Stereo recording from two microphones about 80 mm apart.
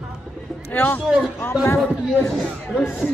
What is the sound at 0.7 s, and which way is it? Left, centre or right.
Speech, left.